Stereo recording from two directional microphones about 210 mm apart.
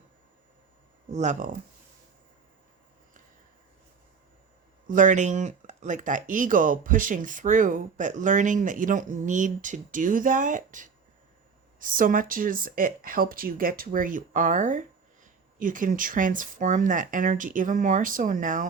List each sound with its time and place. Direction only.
1.1 s speech: 35° right (ahead or behind)
4.9 s speech: 35° right (ahead or behind)